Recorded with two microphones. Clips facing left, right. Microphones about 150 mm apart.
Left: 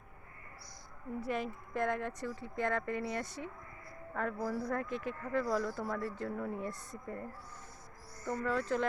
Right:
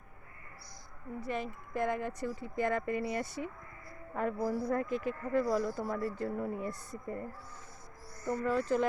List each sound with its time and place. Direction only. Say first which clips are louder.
1.2 s speech: even; centre (ahead or behind)
8.3 s speech: right 3 dB; 5° right (ahead or behind)